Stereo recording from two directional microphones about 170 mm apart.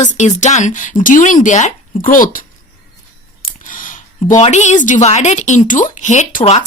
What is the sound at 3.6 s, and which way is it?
A woman's voice, 50° left (ahead or behind).